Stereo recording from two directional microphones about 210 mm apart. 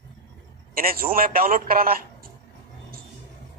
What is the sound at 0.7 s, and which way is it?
A man's voice, 45° right (ahead or behind).